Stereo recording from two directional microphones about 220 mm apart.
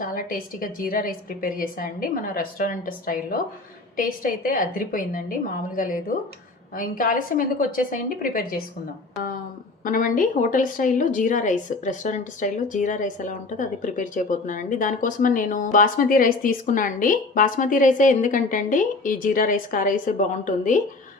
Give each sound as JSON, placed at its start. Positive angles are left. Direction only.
{"t": 0.0, "sound": "a woman's voice", "side_deg": 40}
{"t": 9.8, "sound": "a woman's voice", "side_deg": 40}